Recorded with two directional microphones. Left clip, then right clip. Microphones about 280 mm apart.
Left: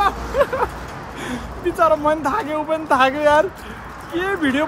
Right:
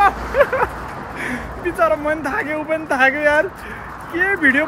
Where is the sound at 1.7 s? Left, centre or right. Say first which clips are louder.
Left 1 dB; centre.